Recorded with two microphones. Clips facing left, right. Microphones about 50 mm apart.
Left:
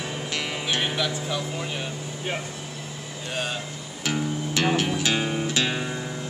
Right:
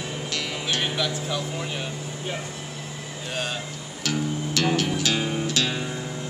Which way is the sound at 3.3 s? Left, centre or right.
Centre.